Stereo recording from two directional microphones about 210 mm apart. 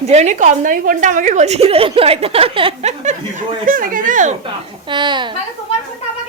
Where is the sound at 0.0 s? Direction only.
30° right (ahead or behind).